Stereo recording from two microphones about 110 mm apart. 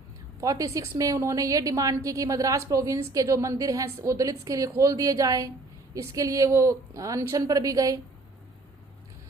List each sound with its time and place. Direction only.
0.4 s a woman's voice: 30° right (ahead or behind)